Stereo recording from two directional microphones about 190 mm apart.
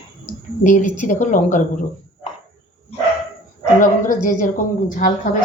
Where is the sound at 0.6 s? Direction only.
45° left (ahead or behind).